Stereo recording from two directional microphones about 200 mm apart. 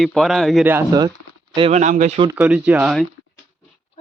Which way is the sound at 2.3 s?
5° right (ahead or behind).